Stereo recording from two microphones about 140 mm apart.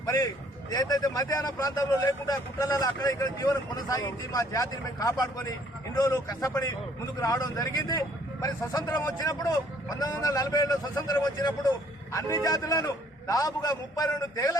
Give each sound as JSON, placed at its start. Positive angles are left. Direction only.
{"t": 0.0, "sound": "a man's voice", "side_deg": 25}